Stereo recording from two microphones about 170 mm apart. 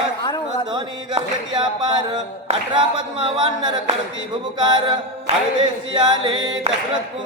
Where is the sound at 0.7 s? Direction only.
25° right (ahead or behind).